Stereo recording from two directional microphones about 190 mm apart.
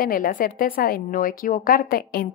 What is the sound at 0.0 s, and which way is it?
Speech, 50° left (ahead or behind).